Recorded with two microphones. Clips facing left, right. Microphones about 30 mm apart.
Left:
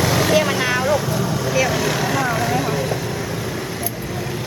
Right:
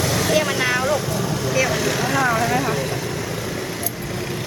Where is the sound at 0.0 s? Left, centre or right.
Centre.